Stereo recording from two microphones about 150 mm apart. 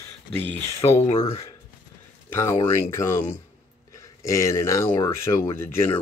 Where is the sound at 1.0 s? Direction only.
45° left (ahead or behind).